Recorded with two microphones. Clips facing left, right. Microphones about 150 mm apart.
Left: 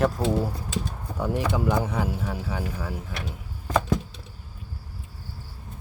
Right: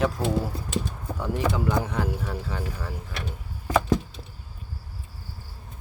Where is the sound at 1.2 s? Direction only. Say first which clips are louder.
Left 1 dB; 10° left (ahead or behind).